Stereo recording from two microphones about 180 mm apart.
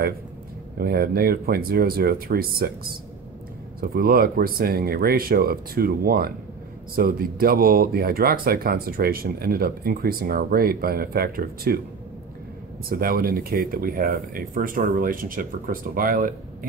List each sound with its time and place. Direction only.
0.7 s speech: 60° right (ahead or behind)
12.8 s speech: 55° right (ahead or behind)